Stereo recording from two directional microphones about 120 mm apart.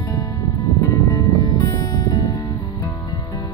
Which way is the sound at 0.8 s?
35° left (ahead or behind).